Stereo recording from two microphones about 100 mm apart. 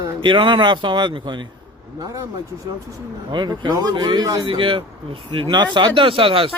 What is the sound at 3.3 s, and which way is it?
Speech, 50° right (ahead or behind).